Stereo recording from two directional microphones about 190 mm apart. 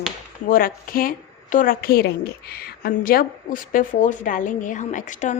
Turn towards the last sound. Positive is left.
turn(degrees=40)  # may be behind; listen again after turning